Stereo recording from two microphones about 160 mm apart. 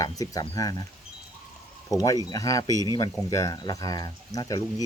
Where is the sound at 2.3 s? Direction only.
25° left (ahead or behind).